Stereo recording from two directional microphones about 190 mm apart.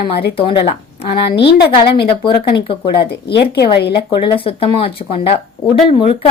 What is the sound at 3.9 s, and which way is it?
A woman's voice, 25° left (ahead or behind).